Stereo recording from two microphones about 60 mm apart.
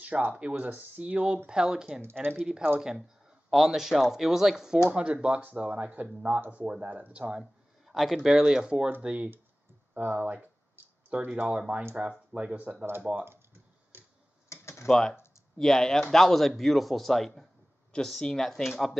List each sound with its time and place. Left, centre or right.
0.0 s speech: right; by 4.7 s centre
4.9 s speech: centre
7.8 s speech: centre
8.8 s speech: right
13.2 s computer keyboard: right
14.5 s typing: left
14.9 s speech: centre